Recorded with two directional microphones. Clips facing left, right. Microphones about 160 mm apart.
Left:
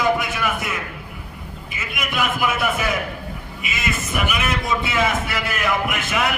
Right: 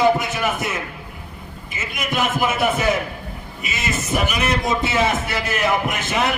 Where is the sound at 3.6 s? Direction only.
40° right (ahead or behind).